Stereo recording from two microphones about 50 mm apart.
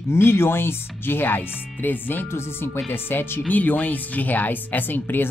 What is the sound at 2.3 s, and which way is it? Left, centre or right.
Speech, left.